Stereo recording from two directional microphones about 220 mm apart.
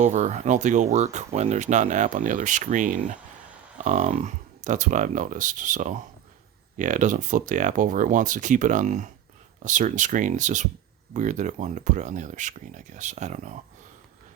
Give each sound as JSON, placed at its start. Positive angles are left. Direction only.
{"t": 0.0, "sound": "speech", "side_deg": -35}